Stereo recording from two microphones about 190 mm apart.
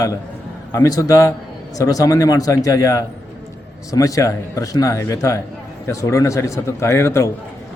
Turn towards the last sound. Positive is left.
turn(degrees=15)  # may be behind; listen again after turning